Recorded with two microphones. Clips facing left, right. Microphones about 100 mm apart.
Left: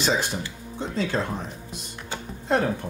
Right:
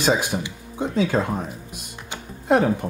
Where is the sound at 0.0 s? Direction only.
10° right (ahead or behind).